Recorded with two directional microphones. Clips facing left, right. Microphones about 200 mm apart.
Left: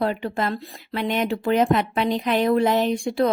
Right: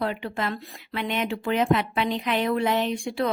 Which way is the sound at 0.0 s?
40° left (ahead or behind).